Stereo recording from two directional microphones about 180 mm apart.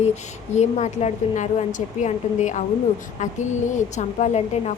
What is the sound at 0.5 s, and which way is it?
A woman's voice, 40° left (ahead or behind).